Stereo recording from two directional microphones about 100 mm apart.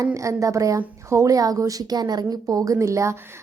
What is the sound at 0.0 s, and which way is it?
A woman's voice, 30° right (ahead or behind).